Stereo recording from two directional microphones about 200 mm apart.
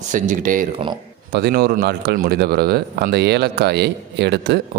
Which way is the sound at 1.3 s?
50° right (ahead or behind).